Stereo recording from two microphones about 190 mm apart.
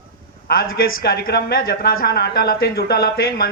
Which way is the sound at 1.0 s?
50° left (ahead or behind).